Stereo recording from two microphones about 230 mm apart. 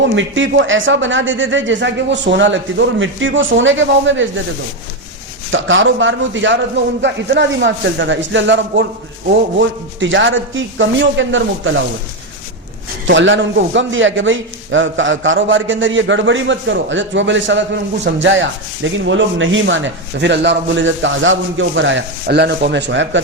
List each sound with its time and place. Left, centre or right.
0.0 s a man's voice: right
5.5 s a man's voice: right
13.1 s a man's voice: right